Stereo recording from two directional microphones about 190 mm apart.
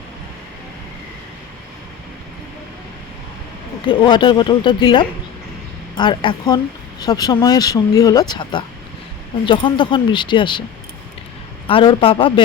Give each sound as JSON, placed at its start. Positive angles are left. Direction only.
{"t": 3.8, "sound": "speech", "side_deg": 25}
{"t": 11.7, "sound": "speech", "side_deg": 25}